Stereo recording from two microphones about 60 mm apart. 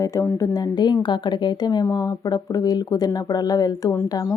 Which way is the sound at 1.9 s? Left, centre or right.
Left.